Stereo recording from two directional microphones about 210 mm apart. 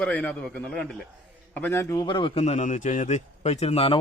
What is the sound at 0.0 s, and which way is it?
A man's voice, 5° left (ahead or behind).